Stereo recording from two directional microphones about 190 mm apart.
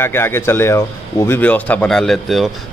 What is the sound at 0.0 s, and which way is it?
Speech, 10° left (ahead or behind).